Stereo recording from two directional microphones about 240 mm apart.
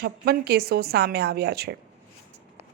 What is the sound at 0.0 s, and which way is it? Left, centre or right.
A woman's voice, right.